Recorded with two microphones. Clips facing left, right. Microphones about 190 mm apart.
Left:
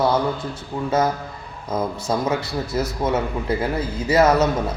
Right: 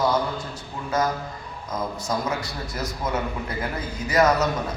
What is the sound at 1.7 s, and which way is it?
A man's voice, 30° left (ahead or behind).